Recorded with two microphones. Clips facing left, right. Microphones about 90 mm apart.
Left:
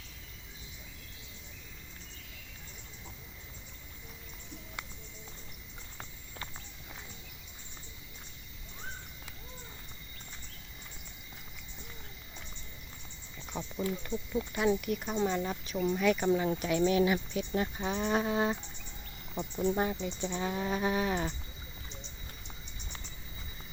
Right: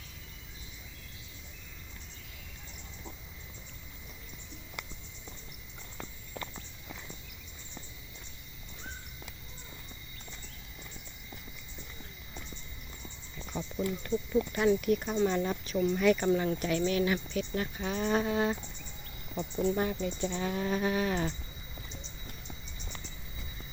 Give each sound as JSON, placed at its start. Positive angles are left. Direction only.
{"t": 13.5, "sound": "speech", "side_deg": 10}